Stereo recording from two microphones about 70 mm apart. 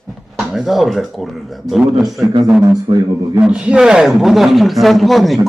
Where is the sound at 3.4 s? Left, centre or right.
Centre.